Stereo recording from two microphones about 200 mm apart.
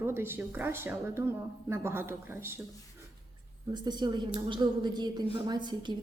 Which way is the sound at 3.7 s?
20° right (ahead or behind).